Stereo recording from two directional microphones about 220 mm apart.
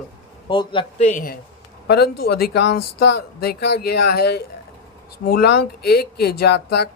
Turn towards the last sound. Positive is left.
turn(degrees=50)  # may be behind; listen again after turning